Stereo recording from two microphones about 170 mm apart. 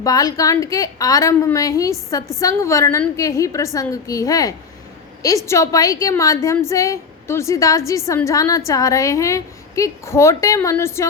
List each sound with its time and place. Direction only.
0.0 s a woman's voice: 20° left (ahead or behind)